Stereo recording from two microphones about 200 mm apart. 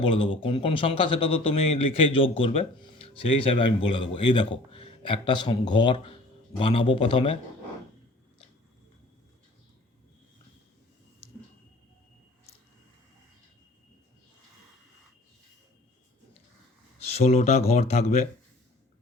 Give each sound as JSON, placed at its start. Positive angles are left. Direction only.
{"t": 0.0, "sound": "a man's voice", "side_deg": 25}
{"t": 17.2, "sound": "speech", "side_deg": 30}